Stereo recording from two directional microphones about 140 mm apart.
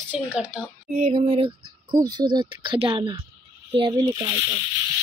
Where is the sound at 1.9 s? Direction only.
30° right (ahead or behind).